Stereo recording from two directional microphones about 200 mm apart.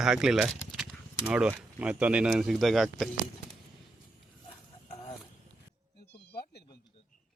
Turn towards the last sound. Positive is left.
turn(degrees=50)  # may be behind; listen again after turning